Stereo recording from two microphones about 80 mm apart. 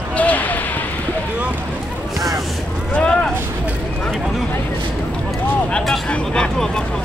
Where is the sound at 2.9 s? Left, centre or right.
Centre.